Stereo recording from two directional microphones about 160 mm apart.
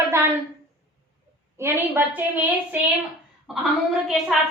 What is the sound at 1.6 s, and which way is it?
A woman's voice, 15° right (ahead or behind).